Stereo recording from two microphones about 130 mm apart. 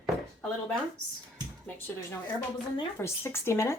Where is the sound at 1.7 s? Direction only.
15° left (ahead or behind).